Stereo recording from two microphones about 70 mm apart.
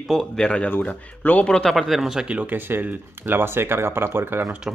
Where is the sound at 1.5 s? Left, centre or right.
Centre.